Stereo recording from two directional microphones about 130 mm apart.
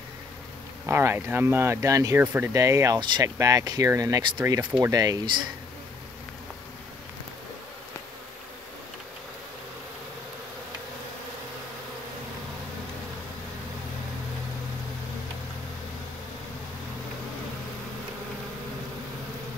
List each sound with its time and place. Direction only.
0.8 s speech: 20° right (ahead or behind)
4.6 s speech: 15° right (ahead or behind)
4.9 s speech: 30° right (ahead or behind)